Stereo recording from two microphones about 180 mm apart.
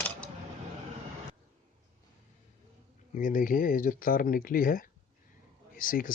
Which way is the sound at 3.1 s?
45° left (ahead or behind).